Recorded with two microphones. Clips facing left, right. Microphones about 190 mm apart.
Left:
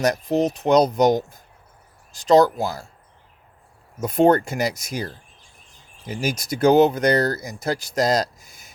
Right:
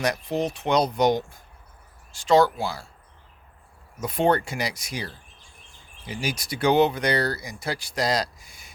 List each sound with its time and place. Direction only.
0.0 s speech: 40° left (ahead or behind)
4.0 s speech: 45° left (ahead or behind)